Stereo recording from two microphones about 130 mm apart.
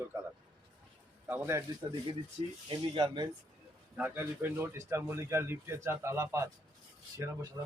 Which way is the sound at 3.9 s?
10° right (ahead or behind).